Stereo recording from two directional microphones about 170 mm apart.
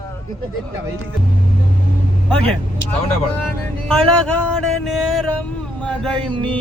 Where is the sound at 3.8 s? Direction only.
5° left (ahead or behind).